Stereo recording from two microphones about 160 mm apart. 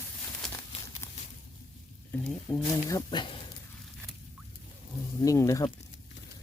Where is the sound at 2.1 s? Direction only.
10° left (ahead or behind).